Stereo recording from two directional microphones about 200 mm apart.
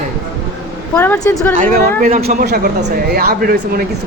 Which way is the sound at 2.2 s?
50° right (ahead or behind).